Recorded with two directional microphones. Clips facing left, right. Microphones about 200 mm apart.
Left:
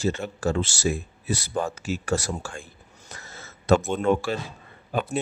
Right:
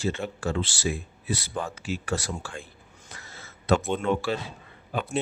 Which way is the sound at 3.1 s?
45° left (ahead or behind).